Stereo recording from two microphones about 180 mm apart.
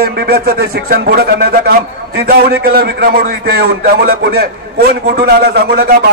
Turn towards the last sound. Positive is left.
turn(degrees=-60)  # may be behind; listen again after turning